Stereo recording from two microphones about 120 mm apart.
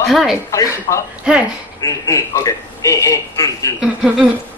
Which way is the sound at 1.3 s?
5° right (ahead or behind).